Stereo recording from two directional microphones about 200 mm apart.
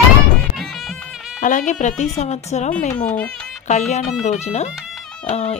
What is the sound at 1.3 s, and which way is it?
Speech, 40° left (ahead or behind).